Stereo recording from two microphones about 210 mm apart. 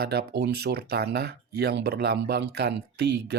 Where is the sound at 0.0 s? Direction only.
50° right (ahead or behind).